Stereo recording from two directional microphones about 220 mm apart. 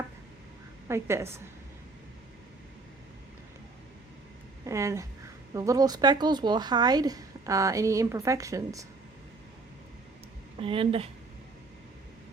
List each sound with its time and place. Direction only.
0.9 s speech: 10° right (ahead or behind)
4.6 s speech: 15° right (ahead or behind)
10.6 s speech: 25° right (ahead or behind)